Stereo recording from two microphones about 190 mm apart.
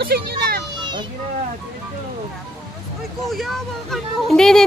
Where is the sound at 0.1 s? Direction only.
55° right (ahead or behind).